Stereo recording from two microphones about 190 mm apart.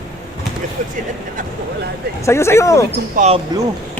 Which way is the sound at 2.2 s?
15° left (ahead or behind).